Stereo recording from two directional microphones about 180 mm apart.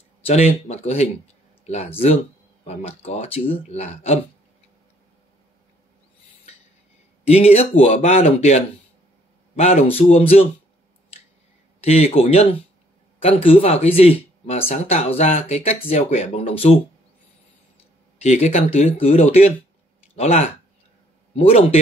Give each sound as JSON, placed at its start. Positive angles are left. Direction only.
{"t": 0.2, "sound": "speech", "side_deg": 35}
{"t": 7.2, "sound": "speech", "side_deg": 35}
{"t": 11.8, "sound": "speech", "side_deg": 35}
{"t": 18.2, "sound": "speech", "side_deg": 40}